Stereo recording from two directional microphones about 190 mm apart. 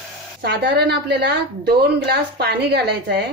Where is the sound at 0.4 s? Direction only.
60° right (ahead or behind).